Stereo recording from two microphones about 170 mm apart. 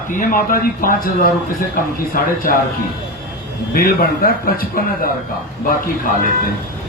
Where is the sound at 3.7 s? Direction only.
60° left (ahead or behind).